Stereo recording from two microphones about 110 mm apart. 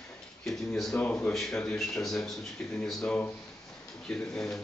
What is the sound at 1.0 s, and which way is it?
Speech, 15° left (ahead or behind).